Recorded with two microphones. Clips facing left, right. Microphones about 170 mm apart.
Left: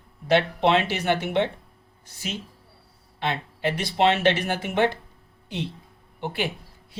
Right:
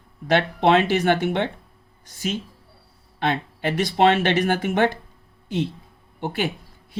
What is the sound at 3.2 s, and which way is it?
Speech, 50° right (ahead or behind).